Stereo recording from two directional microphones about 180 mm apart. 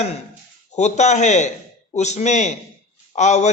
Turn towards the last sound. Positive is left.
turn(degrees=40)  # may be behind; listen again after turning